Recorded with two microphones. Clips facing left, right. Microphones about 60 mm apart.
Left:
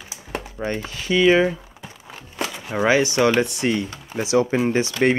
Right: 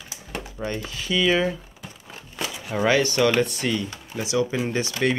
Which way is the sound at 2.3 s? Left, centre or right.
Centre.